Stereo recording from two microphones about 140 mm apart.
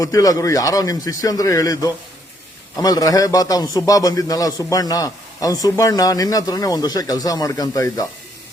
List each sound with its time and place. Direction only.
0.0 s a man's voice: 25° left (ahead or behind)